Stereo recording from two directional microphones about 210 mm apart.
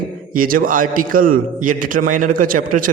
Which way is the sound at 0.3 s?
40° right (ahead or behind).